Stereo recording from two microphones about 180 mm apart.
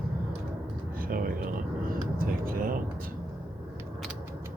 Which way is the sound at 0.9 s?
50° right (ahead or behind).